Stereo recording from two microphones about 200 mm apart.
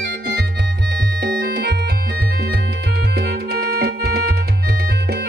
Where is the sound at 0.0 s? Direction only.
55° right (ahead or behind).